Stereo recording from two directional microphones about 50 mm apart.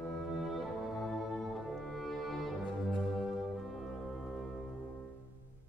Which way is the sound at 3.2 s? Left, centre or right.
Centre.